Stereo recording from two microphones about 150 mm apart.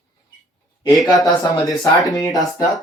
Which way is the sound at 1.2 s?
25° left (ahead or behind).